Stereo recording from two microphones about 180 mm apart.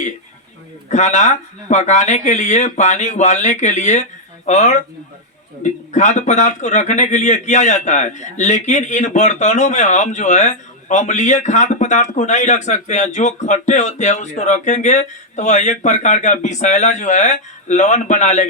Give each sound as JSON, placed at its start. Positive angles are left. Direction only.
{"t": 0.9, "sound": "speech", "side_deg": 40}